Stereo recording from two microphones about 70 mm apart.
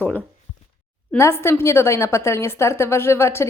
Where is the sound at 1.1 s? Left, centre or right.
Left.